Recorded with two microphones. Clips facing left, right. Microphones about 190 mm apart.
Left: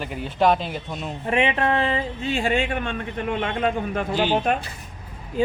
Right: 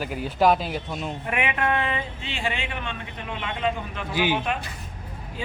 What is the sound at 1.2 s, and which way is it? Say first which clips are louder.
Speech: left 5 dB; 30° left (ahead or behind).